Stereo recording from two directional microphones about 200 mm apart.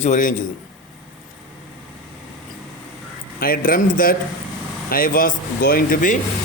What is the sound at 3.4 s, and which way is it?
Speech, 45° left (ahead or behind).